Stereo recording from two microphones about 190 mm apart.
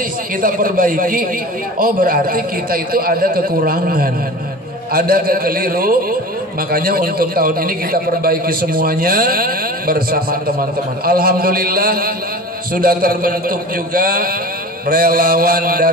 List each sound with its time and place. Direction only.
0.4 s a man's voice: 45° right (ahead or behind)